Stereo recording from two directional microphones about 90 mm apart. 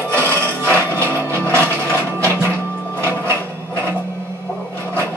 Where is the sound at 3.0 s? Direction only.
30° right (ahead or behind).